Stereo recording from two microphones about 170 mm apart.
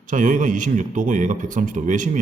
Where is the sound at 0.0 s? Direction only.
50° right (ahead or behind).